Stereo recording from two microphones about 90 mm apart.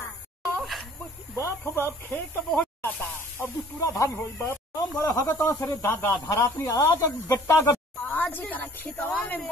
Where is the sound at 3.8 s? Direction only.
35° left (ahead or behind).